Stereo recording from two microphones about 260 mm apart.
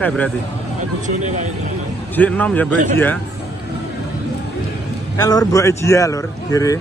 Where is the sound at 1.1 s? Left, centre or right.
Right.